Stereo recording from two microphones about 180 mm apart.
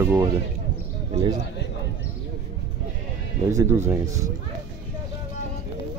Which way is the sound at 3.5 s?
15° right (ahead or behind).